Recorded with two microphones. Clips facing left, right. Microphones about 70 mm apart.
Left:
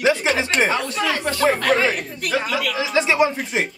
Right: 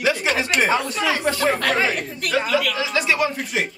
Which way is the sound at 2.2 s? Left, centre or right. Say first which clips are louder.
Right 2 dB; centre.